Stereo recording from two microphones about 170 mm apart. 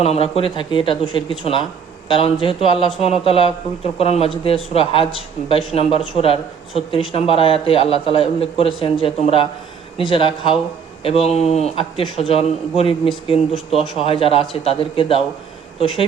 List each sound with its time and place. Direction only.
0.0 s a man's voice: 35° left (ahead or behind)